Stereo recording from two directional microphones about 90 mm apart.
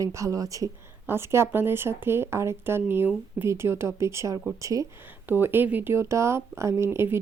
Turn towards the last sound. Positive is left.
turn(degrees=-30)  # may be behind; listen again after turning